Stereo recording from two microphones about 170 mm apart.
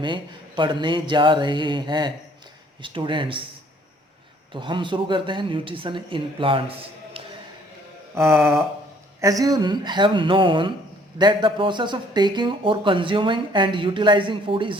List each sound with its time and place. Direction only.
0.0 s speech: 30° right (ahead or behind)
4.5 s speech: 30° right (ahead or behind)
8.1 s a sound: 15° right (ahead or behind)
9.2 s speech: 20° right (ahead or behind)